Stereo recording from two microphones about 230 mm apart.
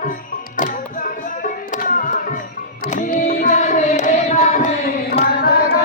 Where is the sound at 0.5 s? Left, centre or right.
Left.